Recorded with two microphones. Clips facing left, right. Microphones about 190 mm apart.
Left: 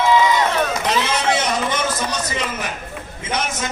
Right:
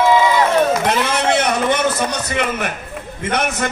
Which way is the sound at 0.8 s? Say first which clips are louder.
Right 2 dB; 55° right (ahead or behind).